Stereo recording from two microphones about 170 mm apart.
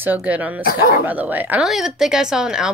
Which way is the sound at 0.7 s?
65° left (ahead or behind).